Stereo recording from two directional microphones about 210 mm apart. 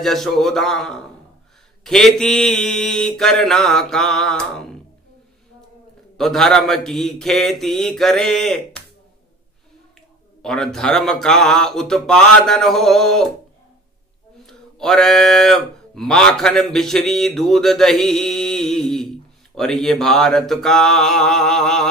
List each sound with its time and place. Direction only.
0.0 s speech: centre (ahead or behind)
6.1 s speech: centre (ahead or behind)
10.4 s speech: centre (ahead or behind)
14.4 s speech: centre (ahead or behind)